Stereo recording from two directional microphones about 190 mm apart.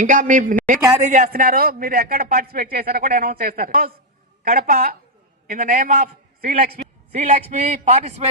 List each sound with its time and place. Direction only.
0.0 s a man's voice: 40° right (ahead or behind)